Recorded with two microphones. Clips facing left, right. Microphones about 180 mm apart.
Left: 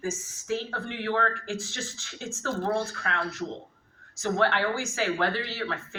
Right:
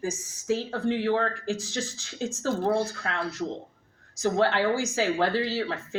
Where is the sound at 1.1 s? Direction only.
15° right (ahead or behind).